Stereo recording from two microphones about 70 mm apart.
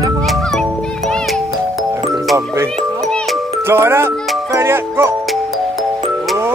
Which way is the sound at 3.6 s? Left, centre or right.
Right.